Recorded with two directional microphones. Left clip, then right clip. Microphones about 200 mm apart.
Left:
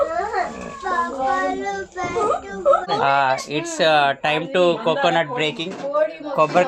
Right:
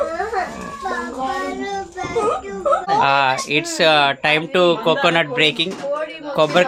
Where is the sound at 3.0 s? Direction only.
15° right (ahead or behind).